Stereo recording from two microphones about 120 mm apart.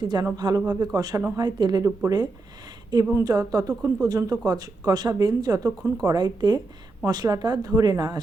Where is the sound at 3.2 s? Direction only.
30° right (ahead or behind).